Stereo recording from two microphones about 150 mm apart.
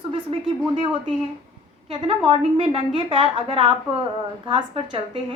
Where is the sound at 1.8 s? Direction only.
40° right (ahead or behind).